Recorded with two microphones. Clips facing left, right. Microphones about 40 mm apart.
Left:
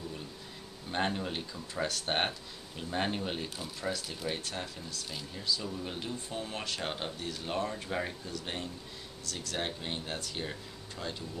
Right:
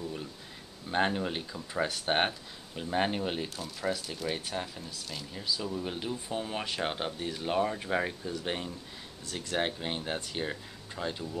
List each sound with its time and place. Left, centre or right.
0.9 s speech: centre
3.4 s speech: centre
4.5 s speech: centre